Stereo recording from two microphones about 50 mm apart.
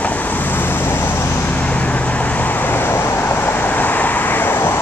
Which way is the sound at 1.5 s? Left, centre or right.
Left.